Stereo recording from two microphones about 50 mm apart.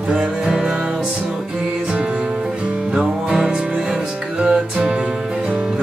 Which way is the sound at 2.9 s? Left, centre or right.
Centre.